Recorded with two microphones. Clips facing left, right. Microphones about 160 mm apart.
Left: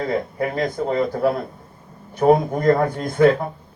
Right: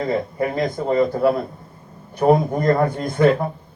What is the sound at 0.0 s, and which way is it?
Speech, centre (ahead or behind).